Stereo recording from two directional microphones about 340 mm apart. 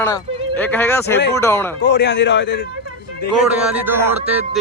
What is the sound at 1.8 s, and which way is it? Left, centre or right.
Speech, left.